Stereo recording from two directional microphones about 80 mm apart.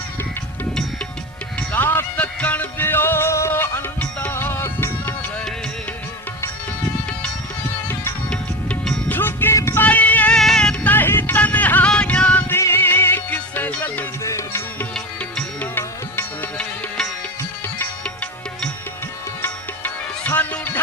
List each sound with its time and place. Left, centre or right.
1.7 s music: left
8.3 s music: centre
9.0 s music: left
9.8 s music: centre
10.3 s music: centre
10.8 s music: left
12.5 s music: left
14.3 s music: left
15.2 s music: left
18.0 s music: centre